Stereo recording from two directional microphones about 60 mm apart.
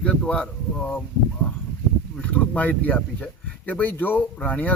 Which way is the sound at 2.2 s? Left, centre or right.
Left.